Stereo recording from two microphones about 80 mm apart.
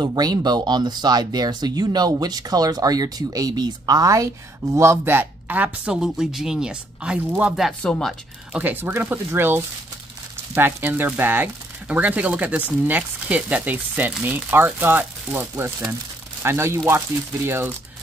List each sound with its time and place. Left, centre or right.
0.0 s speech: right
5.9 s speech: centre
8.5 s speech: right